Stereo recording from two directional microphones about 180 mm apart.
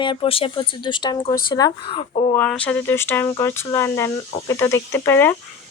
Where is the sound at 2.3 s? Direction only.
10° left (ahead or behind).